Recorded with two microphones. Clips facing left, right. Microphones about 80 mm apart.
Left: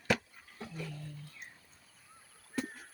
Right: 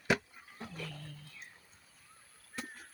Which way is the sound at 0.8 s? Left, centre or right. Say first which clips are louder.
Left 2 dB; centre.